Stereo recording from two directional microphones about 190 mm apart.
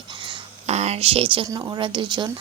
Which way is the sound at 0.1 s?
25° right (ahead or behind).